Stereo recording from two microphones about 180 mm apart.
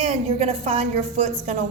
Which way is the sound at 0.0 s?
35° right (ahead or behind).